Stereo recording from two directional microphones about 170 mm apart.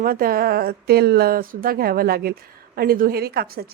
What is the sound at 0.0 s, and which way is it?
A woman's voice, 60° right (ahead or behind).